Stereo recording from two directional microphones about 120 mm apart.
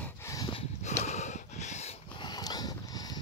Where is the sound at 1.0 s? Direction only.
70° left (ahead or behind).